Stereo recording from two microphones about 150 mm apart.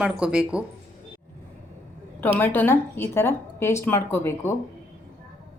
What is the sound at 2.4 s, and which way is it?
A woman's voice, 15° left (ahead or behind).